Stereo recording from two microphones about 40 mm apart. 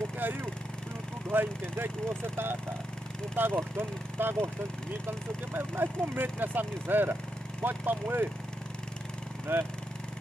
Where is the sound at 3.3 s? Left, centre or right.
Right.